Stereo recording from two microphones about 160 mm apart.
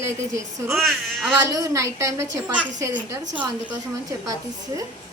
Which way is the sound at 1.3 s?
20° right (ahead or behind).